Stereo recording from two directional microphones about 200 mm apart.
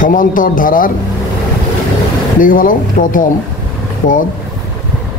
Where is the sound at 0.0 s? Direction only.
40° left (ahead or behind).